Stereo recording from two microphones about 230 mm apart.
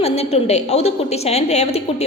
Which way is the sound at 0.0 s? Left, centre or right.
Left.